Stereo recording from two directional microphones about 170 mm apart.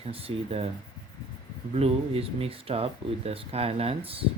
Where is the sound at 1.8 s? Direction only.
35° right (ahead or behind).